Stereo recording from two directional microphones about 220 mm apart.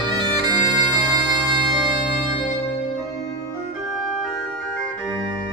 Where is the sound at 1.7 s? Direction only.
20° right (ahead or behind).